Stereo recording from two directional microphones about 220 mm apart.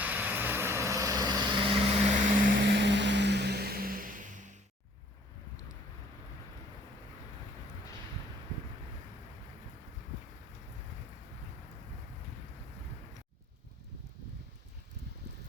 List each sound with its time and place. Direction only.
0.0 s vehicle: 10° right (ahead or behind); by 2.1 s 25° right (ahead or behind)
2.4 s boat: 50° right (ahead or behind)